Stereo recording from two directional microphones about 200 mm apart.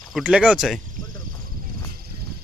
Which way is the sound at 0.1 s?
5° right (ahead or behind).